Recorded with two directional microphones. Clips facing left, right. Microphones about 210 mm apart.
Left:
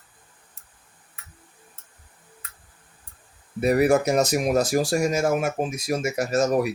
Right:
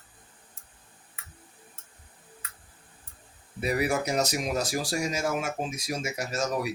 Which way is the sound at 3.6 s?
50° left (ahead or behind).